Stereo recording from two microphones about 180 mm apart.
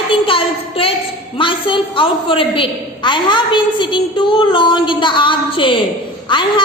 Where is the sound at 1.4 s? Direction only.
30° left (ahead or behind).